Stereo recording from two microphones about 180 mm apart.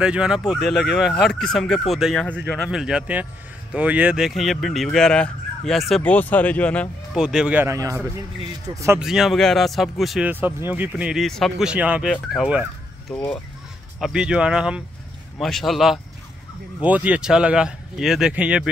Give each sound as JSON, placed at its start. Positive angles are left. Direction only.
{"t": 0.0, "sound": "speech", "side_deg": -5}
{"t": 7.2, "sound": "speech", "side_deg": -5}
{"t": 9.0, "sound": "speech", "side_deg": 0}
{"t": 13.1, "sound": "speech", "side_deg": 5}